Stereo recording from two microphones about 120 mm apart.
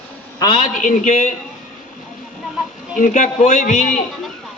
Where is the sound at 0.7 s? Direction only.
90° left.